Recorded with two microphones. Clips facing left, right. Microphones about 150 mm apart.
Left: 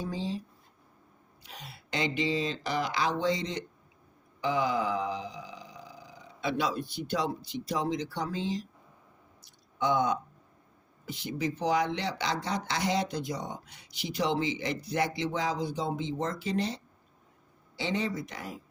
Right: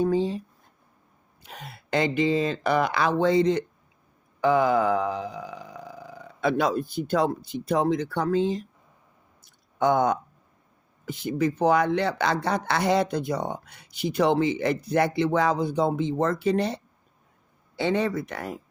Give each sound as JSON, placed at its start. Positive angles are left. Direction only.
{"t": 0.0, "sound": "speech", "side_deg": -55}
{"t": 1.5, "sound": "speech", "side_deg": -55}
{"t": 4.4, "sound": "a sound", "side_deg": -55}
{"t": 9.7, "sound": "speech", "side_deg": -50}